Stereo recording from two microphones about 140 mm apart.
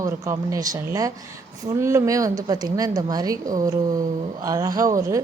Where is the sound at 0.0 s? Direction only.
25° right (ahead or behind).